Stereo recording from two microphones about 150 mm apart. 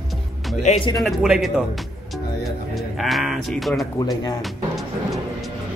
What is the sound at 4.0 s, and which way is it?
Speech, 25° left (ahead or behind).